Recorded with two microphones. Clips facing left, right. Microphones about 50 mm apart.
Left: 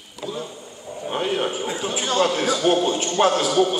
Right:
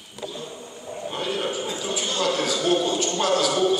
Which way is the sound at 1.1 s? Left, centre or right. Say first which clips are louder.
Left 4 dB; left.